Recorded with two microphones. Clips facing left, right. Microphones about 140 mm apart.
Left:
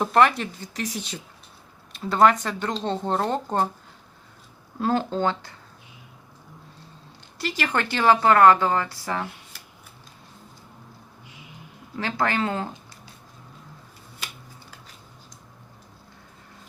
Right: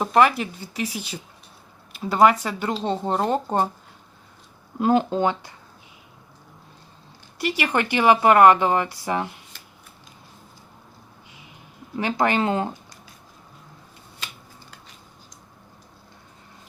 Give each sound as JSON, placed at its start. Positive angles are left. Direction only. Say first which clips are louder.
{"t": 0.0, "sound": "speech", "louder": "right 1 dB", "side_deg": -5}
{"t": 4.8, "sound": "speech", "louder": "right 4 dB", "side_deg": -15}
{"t": 7.3, "sound": "speech", "louder": "right 3 dB", "side_deg": -15}
{"t": 11.9, "sound": "speech", "louder": "right 3 dB", "side_deg": -15}